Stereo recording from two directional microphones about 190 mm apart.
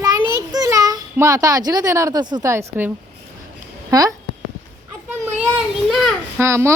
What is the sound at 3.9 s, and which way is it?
Speech, 20° right (ahead or behind).